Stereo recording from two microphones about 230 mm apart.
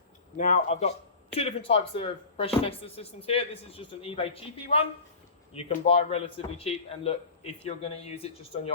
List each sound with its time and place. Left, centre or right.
0.3 s speech: left